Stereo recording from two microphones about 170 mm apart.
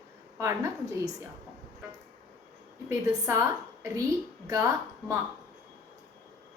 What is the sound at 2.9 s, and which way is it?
Speech, 15° right (ahead or behind).